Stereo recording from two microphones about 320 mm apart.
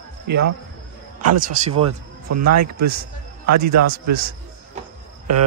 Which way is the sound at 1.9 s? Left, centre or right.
Right.